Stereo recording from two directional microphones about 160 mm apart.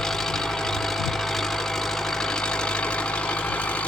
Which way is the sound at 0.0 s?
5° left (ahead or behind).